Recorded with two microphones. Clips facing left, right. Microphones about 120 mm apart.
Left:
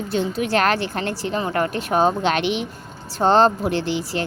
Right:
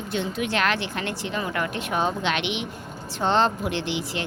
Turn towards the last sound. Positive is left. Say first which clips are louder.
# left 5 dB
turn(degrees=40)  # may be behind; listen again after turning